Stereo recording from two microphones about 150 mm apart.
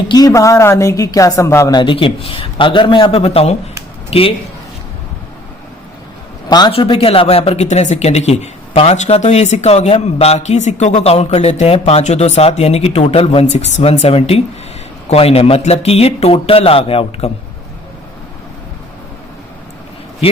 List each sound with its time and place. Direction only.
0.1 s speech: 25° left (ahead or behind)
6.5 s speech: 30° left (ahead or behind)